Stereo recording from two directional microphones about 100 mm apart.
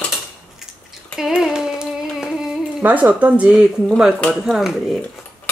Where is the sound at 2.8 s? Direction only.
15° right (ahead or behind).